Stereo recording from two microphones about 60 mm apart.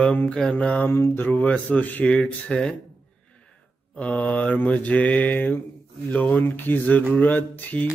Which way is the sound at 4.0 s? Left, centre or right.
Left.